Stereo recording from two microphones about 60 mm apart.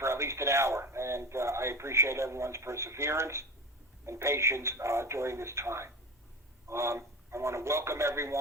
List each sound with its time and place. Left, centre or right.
0.0 s a man's voice: right